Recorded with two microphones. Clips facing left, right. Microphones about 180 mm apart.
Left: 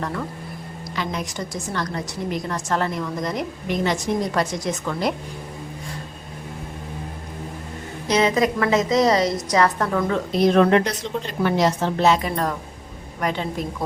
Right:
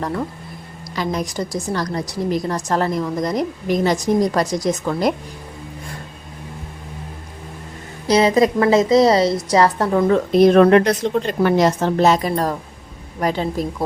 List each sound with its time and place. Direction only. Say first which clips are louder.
0.9 s a woman's voice: right 5 dB; 40° right (ahead or behind)
8.0 s a woman's voice: right 5 dB; 35° right (ahead or behind)
10.3 s a woman's voice: right 5 dB; 55° right (ahead or behind); by 13.7 s 35° right (ahead or behind)